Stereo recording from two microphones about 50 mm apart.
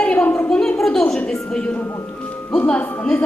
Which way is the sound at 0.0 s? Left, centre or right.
Left.